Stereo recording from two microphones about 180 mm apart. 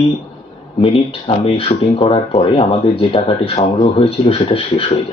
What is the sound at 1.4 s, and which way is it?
Speech, 35° left (ahead or behind).